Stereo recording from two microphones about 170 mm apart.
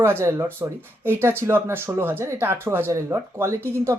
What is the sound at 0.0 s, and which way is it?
Speech, 15° right (ahead or behind).